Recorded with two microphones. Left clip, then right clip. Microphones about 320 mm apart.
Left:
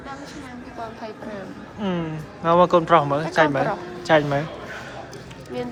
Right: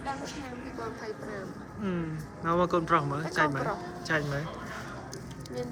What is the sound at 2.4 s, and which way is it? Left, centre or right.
Speech, centre.